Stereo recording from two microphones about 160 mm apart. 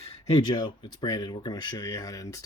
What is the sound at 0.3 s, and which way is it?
Speech, 25° left (ahead or behind).